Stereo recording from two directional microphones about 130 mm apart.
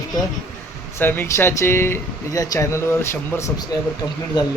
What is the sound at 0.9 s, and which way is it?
Speech, 15° left (ahead or behind).